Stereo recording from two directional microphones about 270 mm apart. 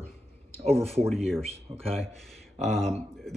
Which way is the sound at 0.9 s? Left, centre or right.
Centre.